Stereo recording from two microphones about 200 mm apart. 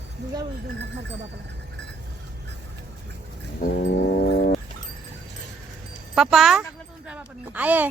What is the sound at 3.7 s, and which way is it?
Music, 70° left (ahead or behind).